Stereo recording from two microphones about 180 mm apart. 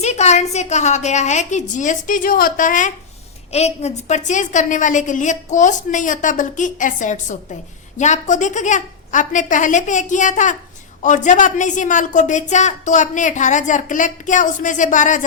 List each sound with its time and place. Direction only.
0.0 s a woman's voice: 40° left (ahead or behind)